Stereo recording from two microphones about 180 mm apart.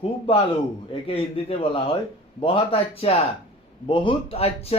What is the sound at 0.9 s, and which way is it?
Speech, 30° left (ahead or behind).